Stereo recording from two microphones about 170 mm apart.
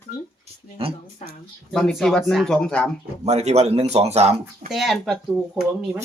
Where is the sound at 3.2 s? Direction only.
40° right (ahead or behind).